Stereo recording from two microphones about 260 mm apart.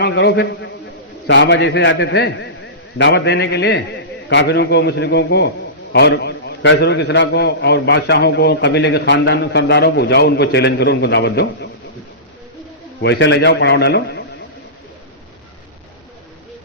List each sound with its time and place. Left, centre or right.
0.0 s a man's voice: left
13.0 s a man's voice: left